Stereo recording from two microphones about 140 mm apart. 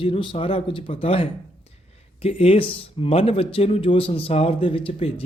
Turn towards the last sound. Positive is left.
turn(degrees=40)  # may be behind; listen again after turning